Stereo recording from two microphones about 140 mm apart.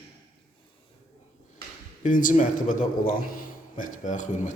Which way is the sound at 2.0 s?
70° left (ahead or behind).